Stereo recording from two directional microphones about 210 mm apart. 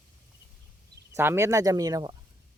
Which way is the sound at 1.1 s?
10° right (ahead or behind).